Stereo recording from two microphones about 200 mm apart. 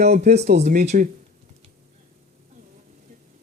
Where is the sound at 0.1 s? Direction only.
35° right (ahead or behind).